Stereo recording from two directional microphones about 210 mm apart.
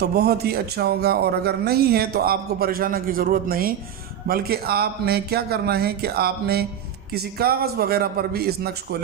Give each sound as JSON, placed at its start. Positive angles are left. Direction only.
{"t": 0.0, "sound": "a man's voice", "side_deg": -50}